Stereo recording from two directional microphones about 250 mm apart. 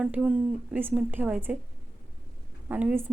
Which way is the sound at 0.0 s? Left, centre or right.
Centre.